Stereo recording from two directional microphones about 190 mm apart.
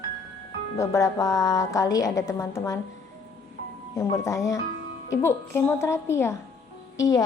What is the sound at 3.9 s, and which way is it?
A woman's voice, 15° left (ahead or behind).